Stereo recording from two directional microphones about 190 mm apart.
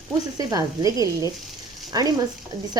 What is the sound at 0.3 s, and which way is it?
A woman's voice, 20° right (ahead or behind).